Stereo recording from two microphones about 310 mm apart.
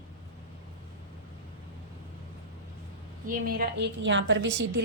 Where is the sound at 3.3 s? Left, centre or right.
Right.